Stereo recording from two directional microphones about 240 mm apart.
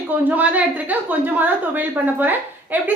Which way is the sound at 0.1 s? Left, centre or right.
Centre.